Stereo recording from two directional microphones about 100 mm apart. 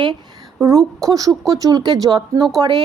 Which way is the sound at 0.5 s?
35° right (ahead or behind).